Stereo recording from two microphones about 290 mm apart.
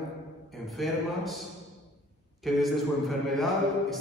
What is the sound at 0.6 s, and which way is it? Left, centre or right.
Speech, centre.